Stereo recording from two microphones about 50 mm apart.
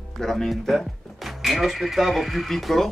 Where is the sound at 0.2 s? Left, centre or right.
Centre.